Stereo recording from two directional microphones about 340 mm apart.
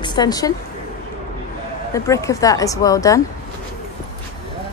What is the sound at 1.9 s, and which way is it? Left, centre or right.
Speech, centre.